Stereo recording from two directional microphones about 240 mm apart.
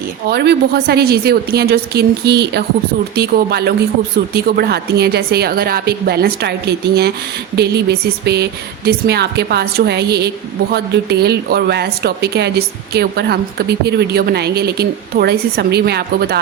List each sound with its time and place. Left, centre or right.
0.3 s a woman's voice: right